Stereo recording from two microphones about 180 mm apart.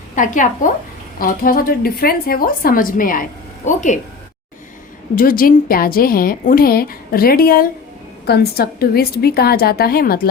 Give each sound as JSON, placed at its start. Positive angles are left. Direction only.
{"t": 0.2, "sound": "speech", "side_deg": 45}
{"t": 5.1, "sound": "a woman's voice", "side_deg": 50}